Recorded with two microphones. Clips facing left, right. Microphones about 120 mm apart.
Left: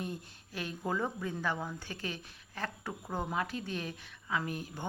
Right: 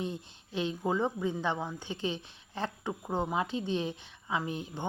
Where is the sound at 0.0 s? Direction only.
25° right (ahead or behind).